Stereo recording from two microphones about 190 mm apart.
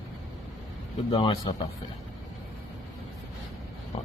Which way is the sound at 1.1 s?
30° left (ahead or behind).